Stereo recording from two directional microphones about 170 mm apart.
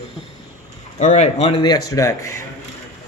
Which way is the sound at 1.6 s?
20° left (ahead or behind).